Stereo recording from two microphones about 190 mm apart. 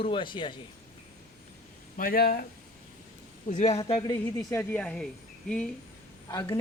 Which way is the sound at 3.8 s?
30° left (ahead or behind).